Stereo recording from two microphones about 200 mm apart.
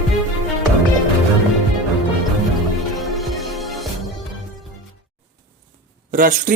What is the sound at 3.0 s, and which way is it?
Music, centre (ahead or behind).